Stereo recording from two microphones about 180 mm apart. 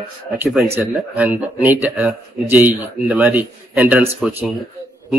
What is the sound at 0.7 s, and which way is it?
A man's voice, 10° right (ahead or behind).